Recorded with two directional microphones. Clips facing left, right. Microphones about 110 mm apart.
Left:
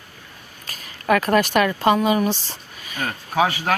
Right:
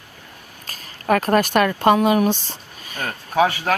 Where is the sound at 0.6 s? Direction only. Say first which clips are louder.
Even; 40° right (ahead or behind).